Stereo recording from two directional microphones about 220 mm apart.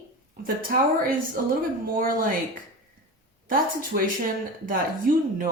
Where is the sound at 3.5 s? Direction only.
40° right (ahead or behind).